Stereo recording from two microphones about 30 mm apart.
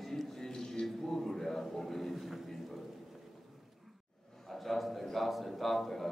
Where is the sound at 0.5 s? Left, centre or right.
Left.